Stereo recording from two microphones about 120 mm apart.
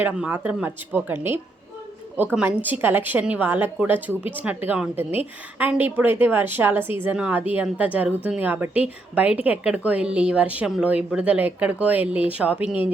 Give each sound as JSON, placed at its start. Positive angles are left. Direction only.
{"t": 0.0, "sound": "a woman's voice", "side_deg": -10}